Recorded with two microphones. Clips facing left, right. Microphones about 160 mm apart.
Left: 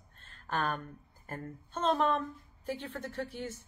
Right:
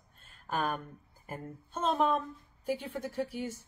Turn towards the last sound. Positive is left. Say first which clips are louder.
# right 3 dB
turn(degrees=-10)  # may be behind; listen again after turning